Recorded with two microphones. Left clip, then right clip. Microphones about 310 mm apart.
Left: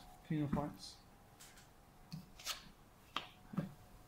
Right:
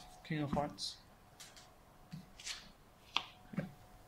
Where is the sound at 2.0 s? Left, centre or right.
Centre.